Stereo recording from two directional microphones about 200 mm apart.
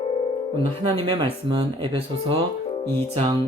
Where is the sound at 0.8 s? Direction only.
25° right (ahead or behind).